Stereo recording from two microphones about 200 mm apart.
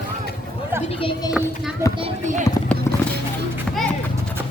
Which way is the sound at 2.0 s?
35° right (ahead or behind).